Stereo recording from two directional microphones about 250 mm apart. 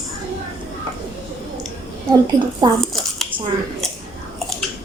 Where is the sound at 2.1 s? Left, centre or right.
Centre.